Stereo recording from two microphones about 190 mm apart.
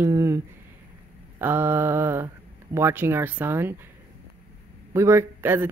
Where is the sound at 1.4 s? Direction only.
10° right (ahead or behind).